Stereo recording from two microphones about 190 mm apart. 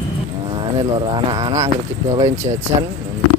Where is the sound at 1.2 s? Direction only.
25° right (ahead or behind).